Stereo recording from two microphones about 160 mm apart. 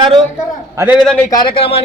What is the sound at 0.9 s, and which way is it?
Speech, 5° left (ahead or behind).